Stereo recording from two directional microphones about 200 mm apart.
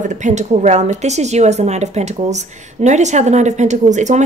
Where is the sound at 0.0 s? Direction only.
40° right (ahead or behind).